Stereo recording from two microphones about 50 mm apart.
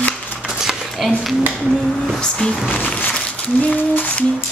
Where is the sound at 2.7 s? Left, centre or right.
Left.